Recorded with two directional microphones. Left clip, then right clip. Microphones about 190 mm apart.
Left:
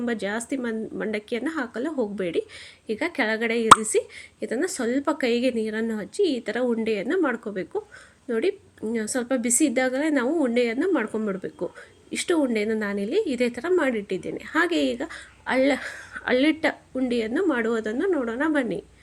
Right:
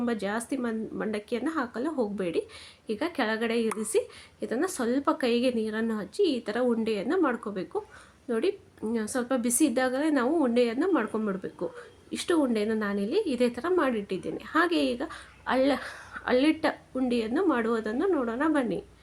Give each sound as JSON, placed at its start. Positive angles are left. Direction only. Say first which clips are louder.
{"t": 0.0, "sound": "a woman's voice", "louder": "left 2 dB", "side_deg": 5}